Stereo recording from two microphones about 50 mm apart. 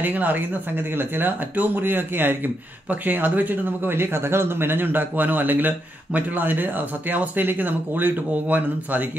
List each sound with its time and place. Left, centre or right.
0.0 s a man's voice: right
3.9 s a man's voice: right